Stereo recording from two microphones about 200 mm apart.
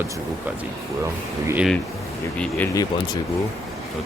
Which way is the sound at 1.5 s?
5° right (ahead or behind).